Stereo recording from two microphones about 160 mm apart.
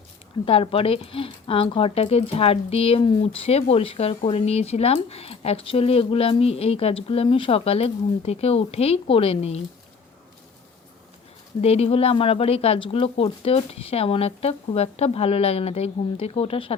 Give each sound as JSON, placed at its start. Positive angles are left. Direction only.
{"t": 0.4, "sound": "speech", "side_deg": 35}
{"t": 11.6, "sound": "speech", "side_deg": 40}